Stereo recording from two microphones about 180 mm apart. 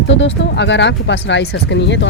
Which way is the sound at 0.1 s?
85° left.